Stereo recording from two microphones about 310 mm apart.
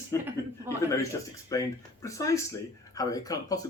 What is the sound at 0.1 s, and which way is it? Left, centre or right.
Speech, centre.